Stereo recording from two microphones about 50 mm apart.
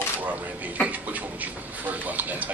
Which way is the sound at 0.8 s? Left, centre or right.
Right.